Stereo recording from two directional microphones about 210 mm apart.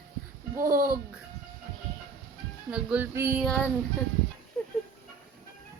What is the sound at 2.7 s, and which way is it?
Female singing, 5° right (ahead or behind).